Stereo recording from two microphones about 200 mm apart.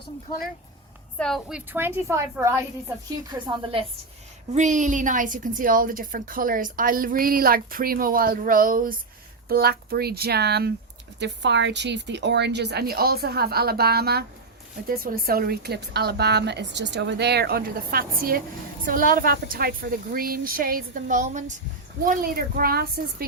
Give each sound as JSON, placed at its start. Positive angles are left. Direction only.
{"t": 1.2, "sound": "a woman's voice", "side_deg": 0}
{"t": 4.5, "sound": "a woman's voice", "side_deg": -40}